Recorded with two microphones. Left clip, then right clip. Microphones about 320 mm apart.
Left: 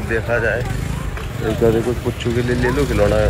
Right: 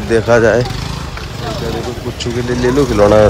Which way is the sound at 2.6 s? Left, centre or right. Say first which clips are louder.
Right 8 dB; centre.